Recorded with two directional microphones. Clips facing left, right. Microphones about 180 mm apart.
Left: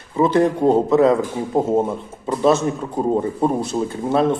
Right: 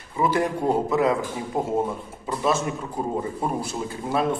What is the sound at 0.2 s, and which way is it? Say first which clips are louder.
A man's voice: left 7 dB; 25° left (ahead or behind).